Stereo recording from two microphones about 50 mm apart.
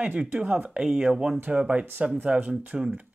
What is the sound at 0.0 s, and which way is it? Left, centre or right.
Speech, right.